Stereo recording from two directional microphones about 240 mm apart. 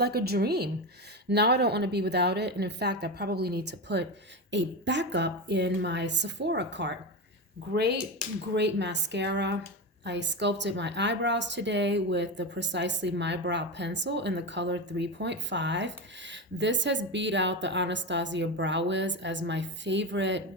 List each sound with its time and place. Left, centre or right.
0.0 s a woman's voice: right